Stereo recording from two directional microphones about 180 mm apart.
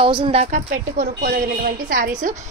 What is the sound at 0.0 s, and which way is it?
A woman's voice, 30° right (ahead or behind).